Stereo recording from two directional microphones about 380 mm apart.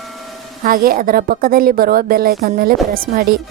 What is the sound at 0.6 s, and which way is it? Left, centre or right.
A woman's voice, right.